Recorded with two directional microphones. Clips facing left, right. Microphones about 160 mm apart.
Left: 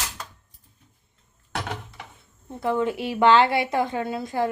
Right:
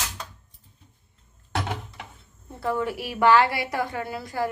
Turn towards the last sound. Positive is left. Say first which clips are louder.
# left 3 dB
turn(degrees=20)  # may be behind; listen again after turning